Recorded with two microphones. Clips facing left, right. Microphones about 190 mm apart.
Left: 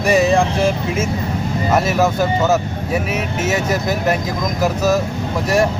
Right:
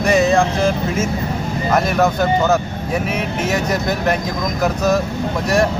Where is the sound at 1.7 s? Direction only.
5° left (ahead or behind).